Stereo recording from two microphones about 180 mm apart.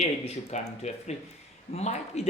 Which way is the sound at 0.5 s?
40° left (ahead or behind).